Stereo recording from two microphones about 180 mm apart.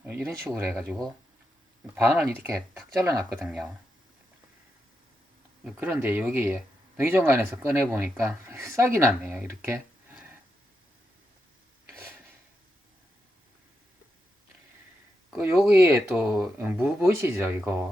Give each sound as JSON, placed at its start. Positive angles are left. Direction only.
{"t": 0.0, "sound": "speech", "side_deg": -10}
{"t": 0.7, "sound": "speech", "side_deg": -5}
{"t": 2.0, "sound": "speech", "side_deg": -10}
{"t": 5.7, "sound": "speech", "side_deg": -10}
{"t": 15.3, "sound": "speech", "side_deg": -5}